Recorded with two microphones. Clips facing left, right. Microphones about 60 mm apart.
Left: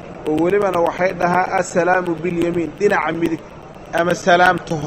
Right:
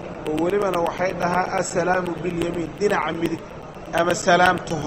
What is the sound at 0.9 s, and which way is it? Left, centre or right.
Speech, left.